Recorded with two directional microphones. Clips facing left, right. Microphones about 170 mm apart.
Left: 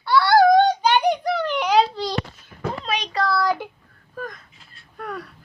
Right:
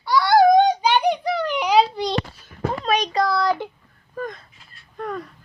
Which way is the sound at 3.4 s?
10° left (ahead or behind).